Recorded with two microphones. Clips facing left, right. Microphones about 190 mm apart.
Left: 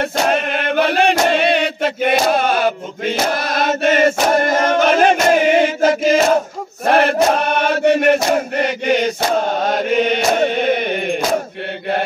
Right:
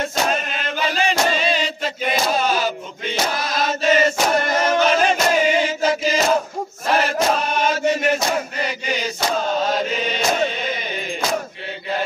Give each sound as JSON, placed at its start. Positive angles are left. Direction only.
{"t": 0.0, "sound": "chant", "side_deg": 60}